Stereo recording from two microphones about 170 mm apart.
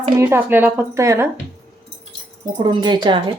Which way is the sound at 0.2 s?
10° right (ahead or behind).